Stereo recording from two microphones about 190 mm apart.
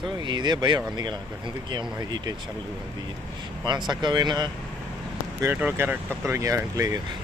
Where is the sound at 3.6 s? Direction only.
20° right (ahead or behind).